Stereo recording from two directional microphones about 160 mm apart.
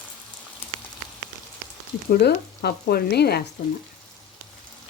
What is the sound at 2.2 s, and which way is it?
Frying, 85° left.